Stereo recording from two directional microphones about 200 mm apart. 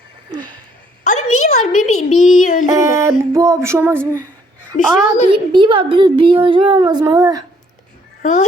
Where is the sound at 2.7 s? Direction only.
15° right (ahead or behind).